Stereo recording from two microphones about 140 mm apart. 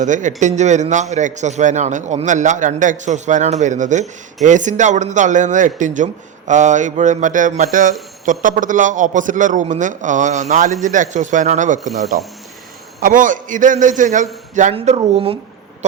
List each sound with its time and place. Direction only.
0.0 s a man's voice: 60° right (ahead or behind)
11.9 s speech: centre (ahead or behind)
13.0 s a man's voice: 70° right (ahead or behind); by 15.4 s 45° right (ahead or behind)